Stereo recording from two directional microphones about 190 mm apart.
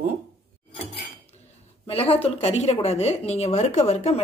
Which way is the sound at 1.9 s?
30° left (ahead or behind).